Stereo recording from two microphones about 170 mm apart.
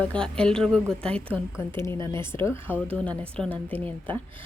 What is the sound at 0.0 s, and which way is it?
A woman's voice, 5° left (ahead or behind).